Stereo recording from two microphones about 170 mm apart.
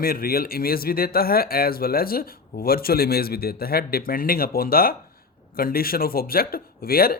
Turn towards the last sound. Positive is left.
turn(degrees=60)  # may be behind; listen again after turning